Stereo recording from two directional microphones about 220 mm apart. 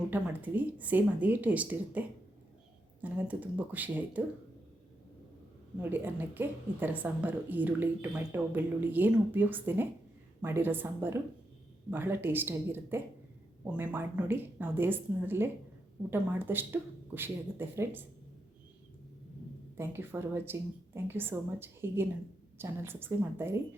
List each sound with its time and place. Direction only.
0.1 s a woman's voice: 10° right (ahead or behind)
5.8 s a woman's voice: 10° right (ahead or behind)
19.7 s a woman's voice: 10° right (ahead or behind)